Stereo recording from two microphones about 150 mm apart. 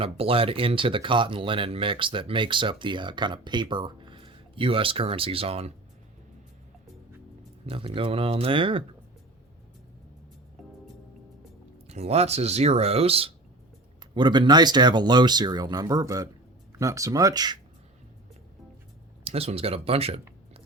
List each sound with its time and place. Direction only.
0.0 s speech: 40° right (ahead or behind)
7.7 s speech: 35° right (ahead or behind)
10.6 s music: centre (ahead or behind)
11.9 s speech: 45° right (ahead or behind)
14.0 s speech: 30° right (ahead or behind)
19.2 s speech: 40° right (ahead or behind)